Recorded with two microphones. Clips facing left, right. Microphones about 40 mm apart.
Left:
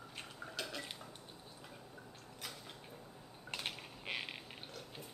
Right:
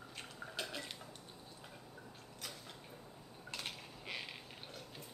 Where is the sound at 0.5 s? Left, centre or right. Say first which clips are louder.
Even; centre.